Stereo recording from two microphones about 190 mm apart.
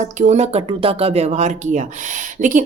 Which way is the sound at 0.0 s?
40° right (ahead or behind).